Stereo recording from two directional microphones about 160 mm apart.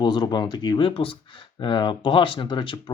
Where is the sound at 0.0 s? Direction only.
30° left (ahead or behind).